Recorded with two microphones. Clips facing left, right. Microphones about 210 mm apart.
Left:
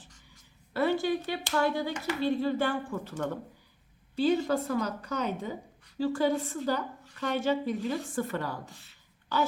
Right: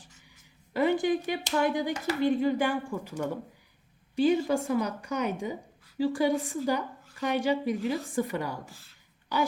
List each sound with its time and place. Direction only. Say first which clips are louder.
0.7 s speech: right 2 dB; 15° right (ahead or behind)